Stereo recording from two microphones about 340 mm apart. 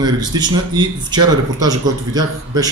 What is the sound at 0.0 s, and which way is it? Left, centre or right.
Speech, centre.